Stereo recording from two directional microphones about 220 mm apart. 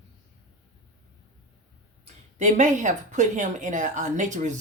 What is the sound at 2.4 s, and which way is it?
A woman's voice, 35° right (ahead or behind).